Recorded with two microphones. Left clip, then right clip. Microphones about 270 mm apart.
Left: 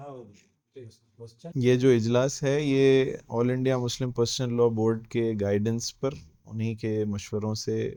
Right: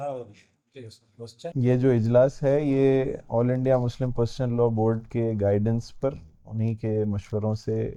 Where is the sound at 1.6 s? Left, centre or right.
Left.